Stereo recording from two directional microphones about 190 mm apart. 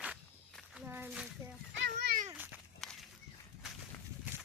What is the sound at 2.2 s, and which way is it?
Speech, 10° right (ahead or behind).